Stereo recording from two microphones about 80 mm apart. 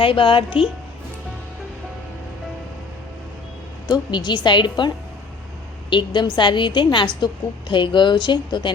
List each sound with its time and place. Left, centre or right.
0.0 s a woman's voice: left
3.8 s a woman's voice: left
5.9 s a woman's voice: left